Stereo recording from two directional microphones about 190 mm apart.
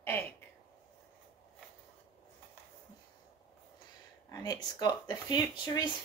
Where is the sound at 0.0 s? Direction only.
10° left (ahead or behind).